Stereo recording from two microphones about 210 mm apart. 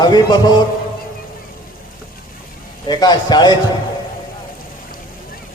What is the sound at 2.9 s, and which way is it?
Speech, 20° left (ahead or behind).